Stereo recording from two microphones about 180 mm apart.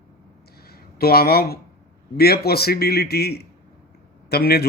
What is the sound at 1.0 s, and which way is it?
A man's voice, 60° left (ahead or behind).